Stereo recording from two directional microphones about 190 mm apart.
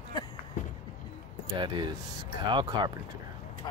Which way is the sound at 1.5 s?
25° right (ahead or behind).